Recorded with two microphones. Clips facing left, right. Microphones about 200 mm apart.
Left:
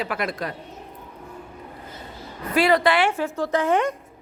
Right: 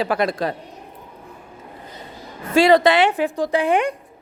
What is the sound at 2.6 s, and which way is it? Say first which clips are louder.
A woman's voice: right 5 dB; 25° right (ahead or behind).